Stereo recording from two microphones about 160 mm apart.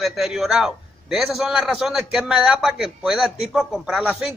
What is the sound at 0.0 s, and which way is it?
Speech, centre (ahead or behind).